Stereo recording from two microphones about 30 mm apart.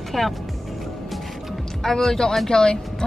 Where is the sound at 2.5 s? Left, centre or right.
Left.